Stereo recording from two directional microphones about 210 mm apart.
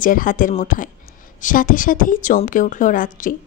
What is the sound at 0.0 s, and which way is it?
A woman's voice, 40° left (ahead or behind).